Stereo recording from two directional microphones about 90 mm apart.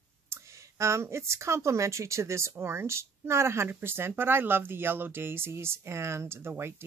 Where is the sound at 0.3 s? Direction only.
35° right (ahead or behind).